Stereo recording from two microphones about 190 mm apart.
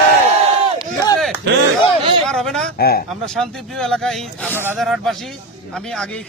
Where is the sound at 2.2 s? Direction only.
Centre (ahead or behind).